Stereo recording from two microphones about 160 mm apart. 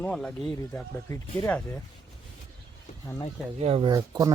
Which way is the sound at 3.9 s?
20° right (ahead or behind).